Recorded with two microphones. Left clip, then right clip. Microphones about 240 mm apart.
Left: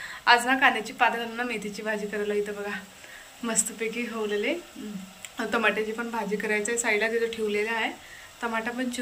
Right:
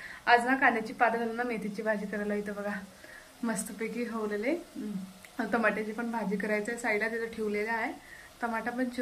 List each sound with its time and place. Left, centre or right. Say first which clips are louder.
0.2 s a woman's voice: left 4 dB; centre